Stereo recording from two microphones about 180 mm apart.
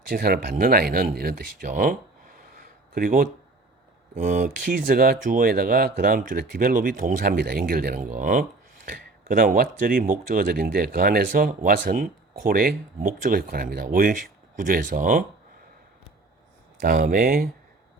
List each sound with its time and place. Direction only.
0.1 s speech: 55° right (ahead or behind)
16.8 s speech: 50° right (ahead or behind)